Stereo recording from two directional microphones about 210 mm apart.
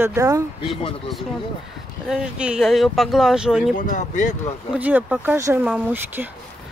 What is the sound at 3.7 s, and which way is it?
Speech, 35° left (ahead or behind).